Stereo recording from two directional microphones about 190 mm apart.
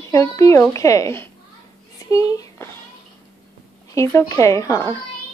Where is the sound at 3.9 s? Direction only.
15° left (ahead or behind).